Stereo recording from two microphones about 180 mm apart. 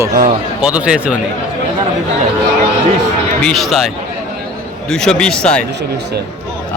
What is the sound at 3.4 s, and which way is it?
Speech, centre (ahead or behind).